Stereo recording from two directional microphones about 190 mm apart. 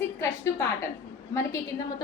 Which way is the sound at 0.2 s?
15° left (ahead or behind).